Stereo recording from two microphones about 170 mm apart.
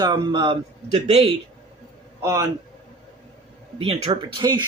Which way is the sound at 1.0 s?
40° right (ahead or behind).